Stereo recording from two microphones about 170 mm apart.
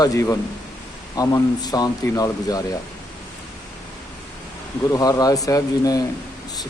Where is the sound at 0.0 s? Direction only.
20° left (ahead or behind).